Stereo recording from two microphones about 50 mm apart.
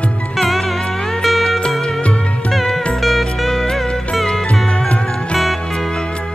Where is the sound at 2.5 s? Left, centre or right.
Centre.